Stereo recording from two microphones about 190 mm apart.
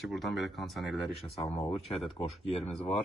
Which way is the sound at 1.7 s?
Centre (ahead or behind).